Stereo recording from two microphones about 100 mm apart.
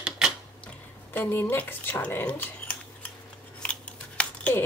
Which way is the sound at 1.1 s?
20° left (ahead or behind).